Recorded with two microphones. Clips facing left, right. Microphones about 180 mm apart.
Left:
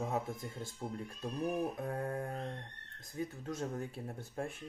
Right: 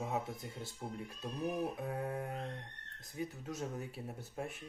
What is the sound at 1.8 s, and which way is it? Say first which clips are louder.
Speech: left 1 dB; 5° right (ahead or behind).